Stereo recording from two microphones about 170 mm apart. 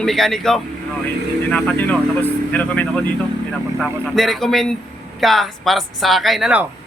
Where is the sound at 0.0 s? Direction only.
Centre (ahead or behind).